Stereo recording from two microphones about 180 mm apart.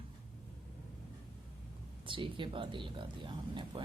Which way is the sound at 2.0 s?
30° right (ahead or behind).